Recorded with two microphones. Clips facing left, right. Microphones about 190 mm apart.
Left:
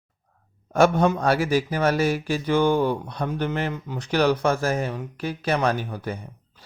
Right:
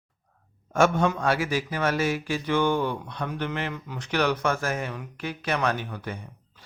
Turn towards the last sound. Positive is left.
turn(degrees=35)  # may be behind; listen again after turning